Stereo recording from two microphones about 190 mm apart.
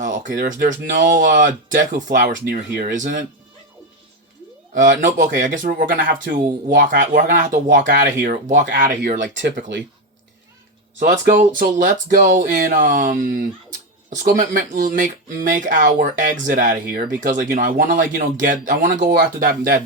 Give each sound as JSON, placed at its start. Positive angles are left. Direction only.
{"t": 0.0, "sound": "speech", "side_deg": -45}
{"t": 4.7, "sound": "speech", "side_deg": -45}
{"t": 11.0, "sound": "speech", "side_deg": -45}
{"t": 19.0, "sound": "speech", "side_deg": -55}